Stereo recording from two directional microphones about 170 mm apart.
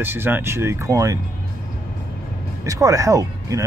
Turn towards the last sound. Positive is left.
turn(degrees=-20)  # may be behind; listen again after turning